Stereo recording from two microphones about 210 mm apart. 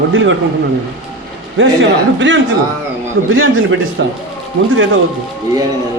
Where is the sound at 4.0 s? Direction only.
60° right (ahead or behind).